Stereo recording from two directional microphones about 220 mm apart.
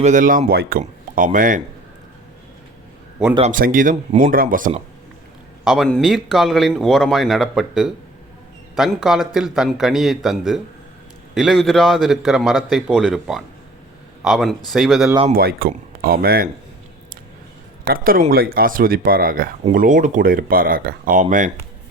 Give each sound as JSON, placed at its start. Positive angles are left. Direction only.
{"t": 0.0, "sound": "speech", "side_deg": -35}
{"t": 3.5, "sound": "speech", "side_deg": -40}
{"t": 5.6, "sound": "a man's voice", "side_deg": 0}
{"t": 15.1, "sound": "speech", "side_deg": -25}
{"t": 15.4, "sound": "speech", "side_deg": -45}
{"t": 17.8, "sound": "speech", "side_deg": -40}